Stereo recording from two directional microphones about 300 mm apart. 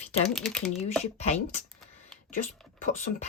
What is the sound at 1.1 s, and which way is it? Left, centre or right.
Speech, left.